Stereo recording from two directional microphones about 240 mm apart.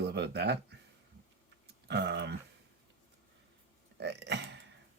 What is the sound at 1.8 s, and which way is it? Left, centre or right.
Speech, right.